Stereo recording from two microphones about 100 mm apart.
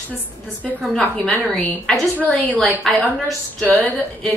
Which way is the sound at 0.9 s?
10° left (ahead or behind).